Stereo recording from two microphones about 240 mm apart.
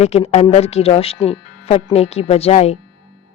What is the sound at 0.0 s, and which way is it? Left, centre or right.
Speech, left.